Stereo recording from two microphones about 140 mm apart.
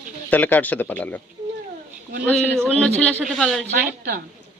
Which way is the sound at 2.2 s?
5° left (ahead or behind).